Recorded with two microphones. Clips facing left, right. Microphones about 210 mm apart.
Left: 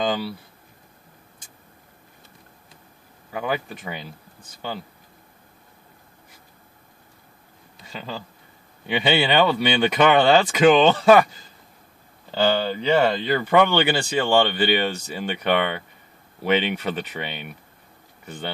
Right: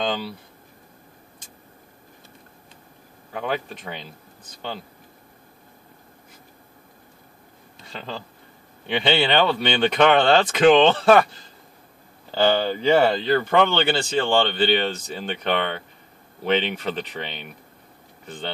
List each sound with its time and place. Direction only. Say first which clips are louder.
0.0 s speech: left 2 dB; 5° left (ahead or behind)
3.3 s speech: left 1 dB; 5° left (ahead or behind)
7.9 s speech: even; 5° left (ahead or behind)
12.6 s speech: right 2 dB; centre (ahead or behind)
13.2 s speech: even; 10° left (ahead or behind)